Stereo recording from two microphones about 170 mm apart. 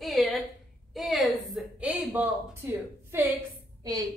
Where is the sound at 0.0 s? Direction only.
Centre (ahead or behind).